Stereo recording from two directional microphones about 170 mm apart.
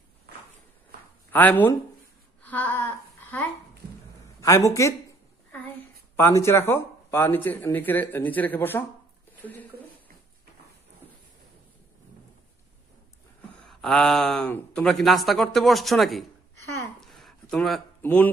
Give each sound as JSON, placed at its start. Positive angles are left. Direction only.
{"t": 1.3, "sound": "speech", "side_deg": 10}
{"t": 2.4, "sound": "a sound", "side_deg": 10}
{"t": 4.4, "sound": "speech", "side_deg": 20}
{"t": 6.1, "sound": "speech", "side_deg": 15}
{"t": 13.7, "sound": "speech", "side_deg": 5}
{"t": 17.0, "sound": "a sound", "side_deg": 0}
{"t": 18.0, "sound": "speech", "side_deg": 10}